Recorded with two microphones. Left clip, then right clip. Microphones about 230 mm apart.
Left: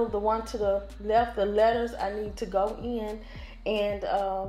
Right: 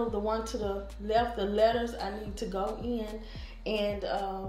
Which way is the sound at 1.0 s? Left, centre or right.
Centre.